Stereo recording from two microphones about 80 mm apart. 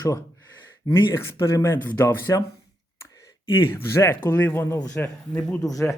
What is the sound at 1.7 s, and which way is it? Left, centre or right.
Speech, left.